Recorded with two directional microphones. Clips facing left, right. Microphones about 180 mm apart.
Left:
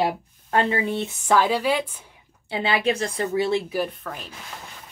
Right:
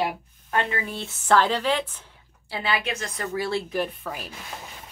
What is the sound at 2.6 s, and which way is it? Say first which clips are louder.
Speech: left 5 dB; 25° left (ahead or behind).